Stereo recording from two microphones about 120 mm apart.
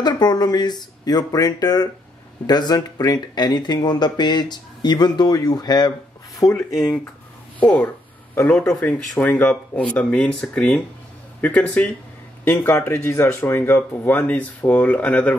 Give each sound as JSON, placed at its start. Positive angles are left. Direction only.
{"t": 0.0, "sound": "speech", "side_deg": 35}
{"t": 7.6, "sound": "speech", "side_deg": 10}